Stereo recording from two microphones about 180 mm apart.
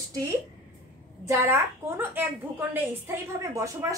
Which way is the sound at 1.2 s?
15° right (ahead or behind).